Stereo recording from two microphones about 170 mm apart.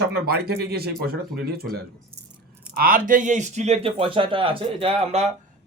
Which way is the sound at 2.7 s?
60° right (ahead or behind).